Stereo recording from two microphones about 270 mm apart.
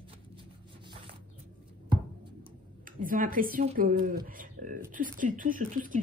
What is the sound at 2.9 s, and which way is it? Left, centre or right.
A woman's voice, right.